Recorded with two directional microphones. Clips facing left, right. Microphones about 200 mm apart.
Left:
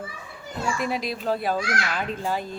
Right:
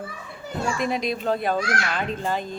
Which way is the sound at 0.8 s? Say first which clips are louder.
Right 3 dB; 5° left (ahead or behind).